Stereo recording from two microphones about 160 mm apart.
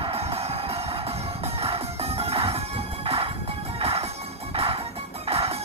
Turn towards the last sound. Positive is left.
turn(degrees=-40)  # may be behind; listen again after turning